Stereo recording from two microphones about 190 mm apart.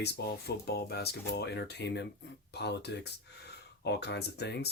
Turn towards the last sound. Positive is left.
turn(degrees=60)  # may be behind; listen again after turning